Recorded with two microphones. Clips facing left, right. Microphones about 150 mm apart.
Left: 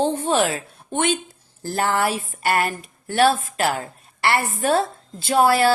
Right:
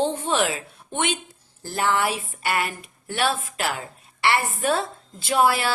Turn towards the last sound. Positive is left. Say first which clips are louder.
# left 4 dB
turn(degrees=35)  # may be behind; listen again after turning